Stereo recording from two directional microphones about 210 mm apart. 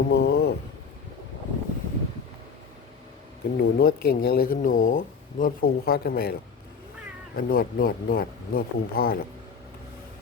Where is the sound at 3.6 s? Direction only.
50° left (ahead or behind).